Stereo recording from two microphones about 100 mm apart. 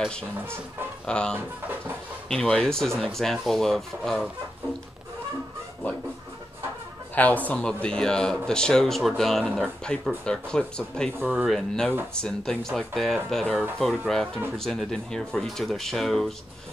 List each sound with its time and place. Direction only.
1.0 s speech: 10° left (ahead or behind)
1.3 s speech: 20° right (ahead or behind)
2.2 s speech: 5° left (ahead or behind)
7.4 s speech: 10° left (ahead or behind)